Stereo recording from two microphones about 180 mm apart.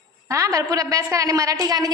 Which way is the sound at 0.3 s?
15° right (ahead or behind).